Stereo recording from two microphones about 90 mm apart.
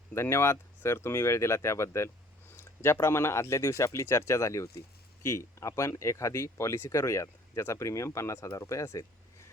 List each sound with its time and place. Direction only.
0.1 s speech: 30° left (ahead or behind)